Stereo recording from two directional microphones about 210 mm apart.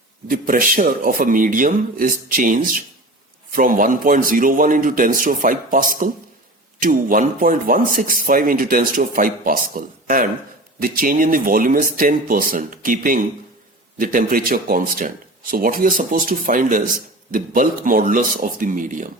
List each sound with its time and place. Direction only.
0.3 s speech: 40° right (ahead or behind)